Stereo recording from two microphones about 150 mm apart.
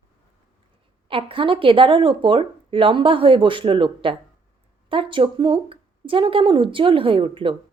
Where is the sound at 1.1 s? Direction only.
35° right (ahead or behind).